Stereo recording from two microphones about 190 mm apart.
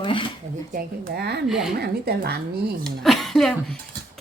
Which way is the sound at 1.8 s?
55° right (ahead or behind).